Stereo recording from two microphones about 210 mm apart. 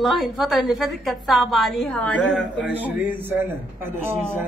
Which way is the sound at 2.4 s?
60° left (ahead or behind).